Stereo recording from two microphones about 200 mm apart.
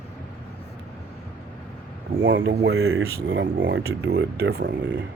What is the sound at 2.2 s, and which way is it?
Speech, 70° right (ahead or behind).